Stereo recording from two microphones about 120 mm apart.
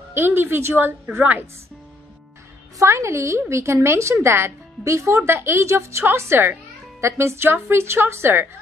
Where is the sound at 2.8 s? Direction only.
25° right (ahead or behind).